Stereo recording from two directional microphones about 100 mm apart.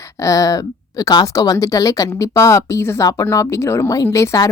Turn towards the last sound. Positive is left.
turn(degrees=30)  # may be behind; listen again after turning